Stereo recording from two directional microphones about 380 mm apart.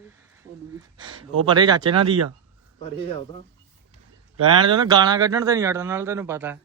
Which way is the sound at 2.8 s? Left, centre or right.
Centre.